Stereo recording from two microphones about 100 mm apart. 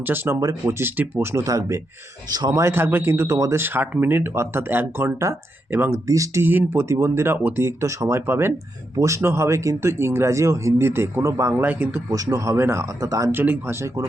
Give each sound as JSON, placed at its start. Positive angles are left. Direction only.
{"t": 0.0, "sound": "speech", "side_deg": -20}
{"t": 2.6, "sound": "speech", "side_deg": -25}
{"t": 3.6, "sound": "speech", "side_deg": -20}
{"t": 6.1, "sound": "speech", "side_deg": -35}
{"t": 6.4, "sound": "speech", "side_deg": -20}
{"t": 11.5, "sound": "speech", "side_deg": -15}
{"t": 12.1, "sound": "speech", "side_deg": -35}
{"t": 13.3, "sound": "speech", "side_deg": -20}